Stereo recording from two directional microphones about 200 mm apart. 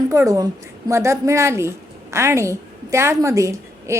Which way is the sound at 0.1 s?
15° right (ahead or behind).